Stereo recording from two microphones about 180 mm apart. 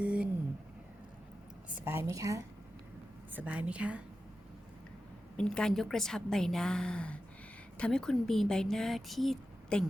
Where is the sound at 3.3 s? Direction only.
10° right (ahead or behind).